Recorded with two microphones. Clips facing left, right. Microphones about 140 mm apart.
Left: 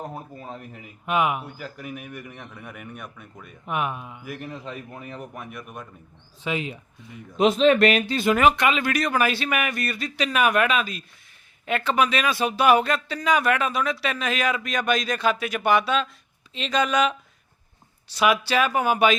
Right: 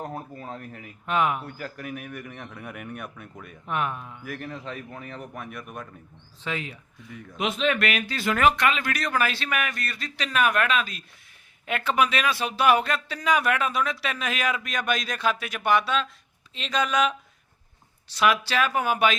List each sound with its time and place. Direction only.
0.5 s speech: 15° left (ahead or behind); by 3.5 s 5° right (ahead or behind)
3.7 s speech: 10° left (ahead or behind)
6.4 s speech: 20° left (ahead or behind)
7.3 s speech: 35° left (ahead or behind)
8.4 s speech: 10° left (ahead or behind)